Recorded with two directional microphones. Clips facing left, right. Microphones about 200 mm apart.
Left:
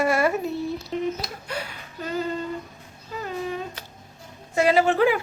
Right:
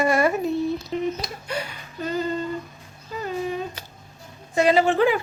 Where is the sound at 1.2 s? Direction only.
5° left (ahead or behind).